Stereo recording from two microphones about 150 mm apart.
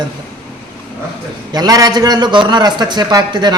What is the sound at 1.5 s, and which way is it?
A man's voice, 25° right (ahead or behind).